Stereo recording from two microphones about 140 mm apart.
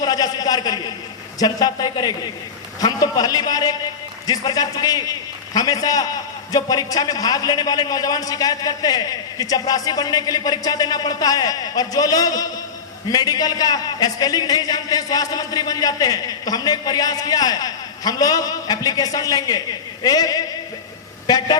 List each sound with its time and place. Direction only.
0.0 s a man's voice: 30° left (ahead or behind)